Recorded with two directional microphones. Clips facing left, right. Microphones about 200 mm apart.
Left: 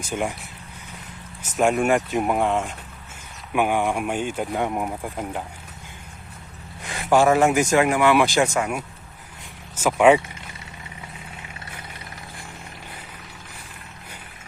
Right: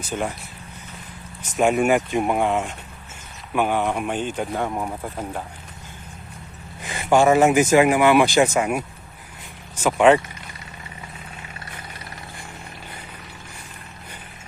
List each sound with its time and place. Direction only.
0.0 s speech: 10° left (ahead or behind)
1.4 s speech: centre (ahead or behind)
3.5 s speech: 10° left (ahead or behind)
6.8 s speech: centre (ahead or behind)
9.7 s speech: 5° left (ahead or behind)